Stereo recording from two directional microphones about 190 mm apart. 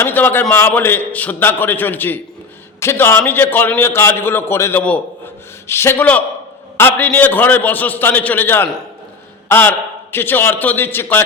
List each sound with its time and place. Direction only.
0.0 s a man's voice: 10° left (ahead or behind)